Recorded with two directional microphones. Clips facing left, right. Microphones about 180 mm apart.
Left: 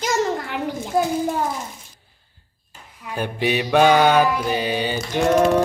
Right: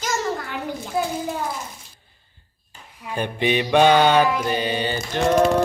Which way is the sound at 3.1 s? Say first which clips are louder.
Even; 5° left (ahead or behind).